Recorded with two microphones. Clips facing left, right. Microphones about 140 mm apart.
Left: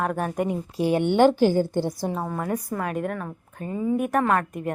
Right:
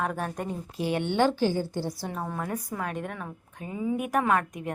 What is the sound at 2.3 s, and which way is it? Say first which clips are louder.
A woman's voice: left 5 dB; 5° left (ahead or behind).